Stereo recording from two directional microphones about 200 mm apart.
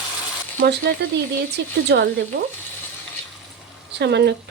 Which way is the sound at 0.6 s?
55° right (ahead or behind).